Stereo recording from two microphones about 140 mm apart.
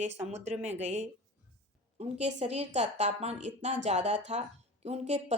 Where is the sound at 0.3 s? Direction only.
50° right (ahead or behind).